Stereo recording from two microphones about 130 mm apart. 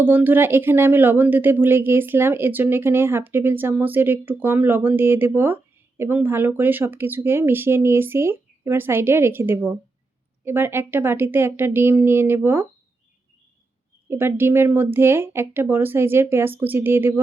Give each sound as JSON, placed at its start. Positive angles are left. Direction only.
{"t": 0.0, "sound": "speech", "side_deg": -15}
{"t": 14.1, "sound": "speech", "side_deg": -15}